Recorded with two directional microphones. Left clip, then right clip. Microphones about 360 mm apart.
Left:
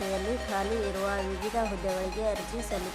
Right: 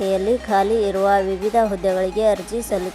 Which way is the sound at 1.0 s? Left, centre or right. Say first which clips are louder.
Right 14 dB; centre.